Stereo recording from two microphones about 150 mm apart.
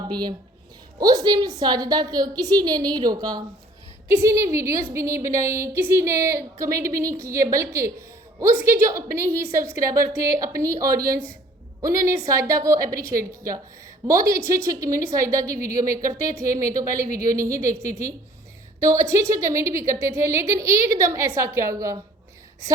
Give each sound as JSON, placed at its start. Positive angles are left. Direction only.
{"t": 0.1, "sound": "a woman's voice", "side_deg": -30}
{"t": 10.9, "sound": "speech", "side_deg": -80}
{"t": 11.8, "sound": "a woman's voice", "side_deg": -20}
{"t": 14.1, "sound": "a woman's voice", "side_deg": -20}
{"t": 15.5, "sound": "speech", "side_deg": -70}
{"t": 16.0, "sound": "a woman's voice", "side_deg": -20}